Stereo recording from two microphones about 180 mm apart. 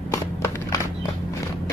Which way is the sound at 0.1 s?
15° left (ahead or behind).